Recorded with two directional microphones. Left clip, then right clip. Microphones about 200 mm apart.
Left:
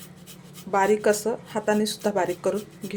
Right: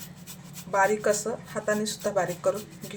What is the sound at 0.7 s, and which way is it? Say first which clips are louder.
Speech: left 3 dB; 35° left (ahead or behind).